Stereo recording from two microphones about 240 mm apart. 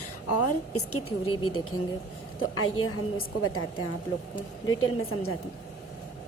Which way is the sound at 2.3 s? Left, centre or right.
Left.